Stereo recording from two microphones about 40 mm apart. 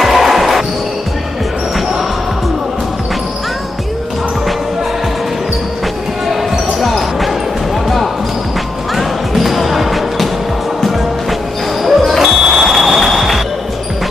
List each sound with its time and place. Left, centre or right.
0.0 s music: centre
6.8 s basketball bounce: centre
8.9 s music: centre
12.2 s smoke detector: centre
12.6 s vehicle: centre